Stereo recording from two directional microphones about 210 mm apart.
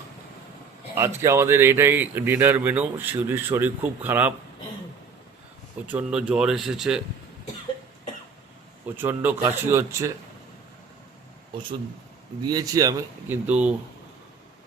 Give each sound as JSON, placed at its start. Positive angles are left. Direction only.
{"t": 0.9, "sound": "speech", "side_deg": -15}
{"t": 5.9, "sound": "speech", "side_deg": -5}
{"t": 9.0, "sound": "speech", "side_deg": -10}
{"t": 12.4, "sound": "speech", "side_deg": -20}